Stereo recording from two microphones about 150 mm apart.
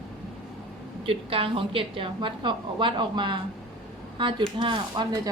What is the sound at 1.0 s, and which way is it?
A woman's voice, 35° right (ahead or behind).